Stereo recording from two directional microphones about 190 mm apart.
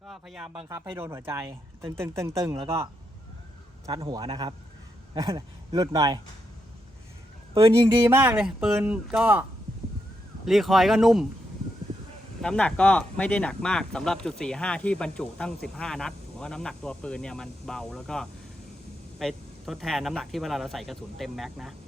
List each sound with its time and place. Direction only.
0.1 s speech: centre (ahead or behind)
2.5 s a man's voice: 30° right (ahead or behind)
3.8 s speech: 25° right (ahead or behind)
7.7 s speech: 15° right (ahead or behind)
12.4 s speech: 5° left (ahead or behind)